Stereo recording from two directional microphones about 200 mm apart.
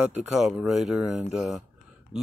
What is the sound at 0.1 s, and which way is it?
Speech, centre (ahead or behind).